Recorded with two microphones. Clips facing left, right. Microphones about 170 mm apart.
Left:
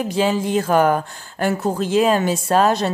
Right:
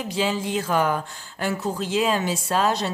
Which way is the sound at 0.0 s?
50° left (ahead or behind).